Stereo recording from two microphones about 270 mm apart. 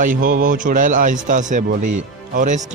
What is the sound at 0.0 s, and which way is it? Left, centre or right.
Speech, right.